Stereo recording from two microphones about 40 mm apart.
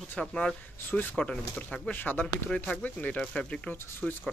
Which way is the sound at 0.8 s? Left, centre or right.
Left.